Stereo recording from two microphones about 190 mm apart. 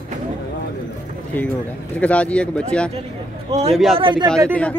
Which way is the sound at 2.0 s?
5° left (ahead or behind).